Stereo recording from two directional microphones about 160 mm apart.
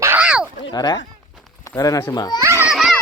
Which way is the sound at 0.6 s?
25° left (ahead or behind).